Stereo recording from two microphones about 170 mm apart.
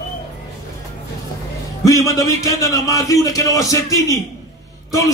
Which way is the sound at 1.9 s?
20° left (ahead or behind).